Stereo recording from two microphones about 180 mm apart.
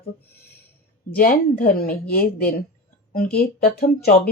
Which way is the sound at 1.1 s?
55° left (ahead or behind).